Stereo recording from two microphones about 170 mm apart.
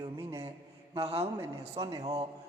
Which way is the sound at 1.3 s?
20° right (ahead or behind).